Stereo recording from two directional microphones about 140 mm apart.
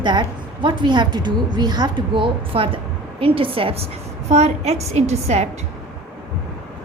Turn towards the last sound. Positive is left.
turn(degrees=-50)  # may be behind; listen again after turning